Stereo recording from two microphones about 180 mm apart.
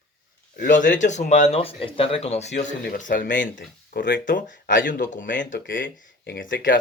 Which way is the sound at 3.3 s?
90° left.